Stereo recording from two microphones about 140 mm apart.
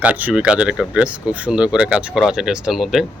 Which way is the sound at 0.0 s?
10° right (ahead or behind).